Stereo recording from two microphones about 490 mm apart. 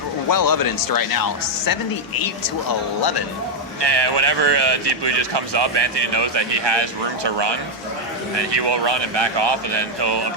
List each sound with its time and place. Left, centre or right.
0.3 s speech: left
3.8 s speech: right